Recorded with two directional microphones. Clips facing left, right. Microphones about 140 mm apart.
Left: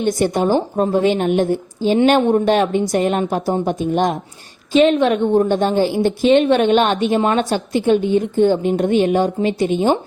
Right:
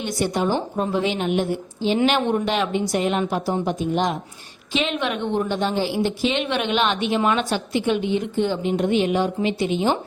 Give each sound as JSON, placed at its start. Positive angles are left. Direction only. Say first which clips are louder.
{"t": 0.0, "sound": "a woman's voice", "louder": "left 6 dB", "side_deg": 50}